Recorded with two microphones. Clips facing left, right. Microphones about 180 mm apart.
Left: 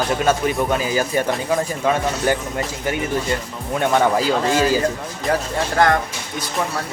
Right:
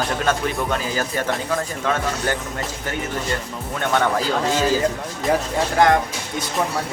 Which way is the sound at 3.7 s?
10° left (ahead or behind).